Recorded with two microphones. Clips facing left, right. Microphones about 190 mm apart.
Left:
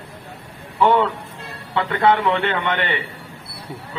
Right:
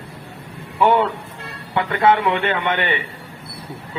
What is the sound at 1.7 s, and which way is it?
A man's voice, 20° right (ahead or behind).